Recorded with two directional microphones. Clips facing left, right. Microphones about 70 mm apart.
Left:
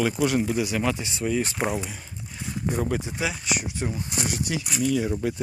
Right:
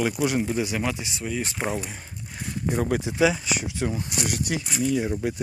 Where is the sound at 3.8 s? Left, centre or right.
Right.